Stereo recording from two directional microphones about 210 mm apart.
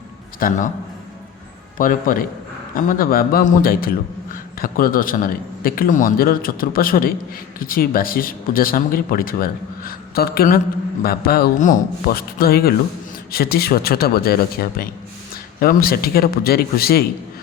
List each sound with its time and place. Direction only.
0.3 s a man's voice: 40° left (ahead or behind)
1.8 s a man's voice: 40° left (ahead or behind)